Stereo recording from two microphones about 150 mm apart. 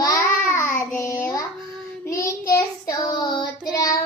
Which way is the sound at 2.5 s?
20° left (ahead or behind).